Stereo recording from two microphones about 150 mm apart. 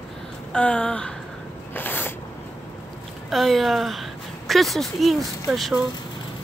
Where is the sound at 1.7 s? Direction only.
15° left (ahead or behind).